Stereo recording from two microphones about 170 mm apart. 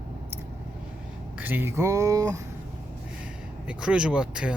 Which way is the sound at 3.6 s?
5° right (ahead or behind).